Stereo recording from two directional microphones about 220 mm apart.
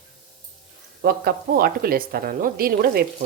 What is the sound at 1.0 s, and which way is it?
A woman's voice, 45° right (ahead or behind).